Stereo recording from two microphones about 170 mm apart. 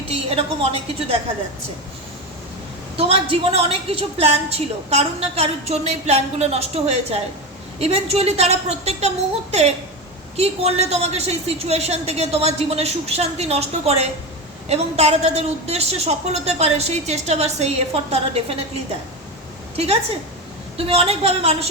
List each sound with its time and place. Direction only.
0.1 s a woman's voice: 35° right (ahead or behind)
3.0 s a woman's voice: 35° right (ahead or behind)
19.7 s a woman's voice: 35° right (ahead or behind)